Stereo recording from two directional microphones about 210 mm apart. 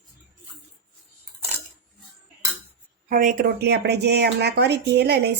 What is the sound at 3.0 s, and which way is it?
Speech, 40° right (ahead or behind).